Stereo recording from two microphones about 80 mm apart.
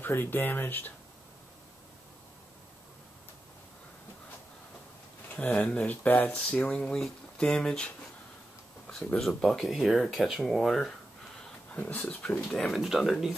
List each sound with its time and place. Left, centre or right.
0.0 s speech: left
5.3 s speech: centre
9.4 s speech: centre
11.7 s speech: left
12.4 s speech: centre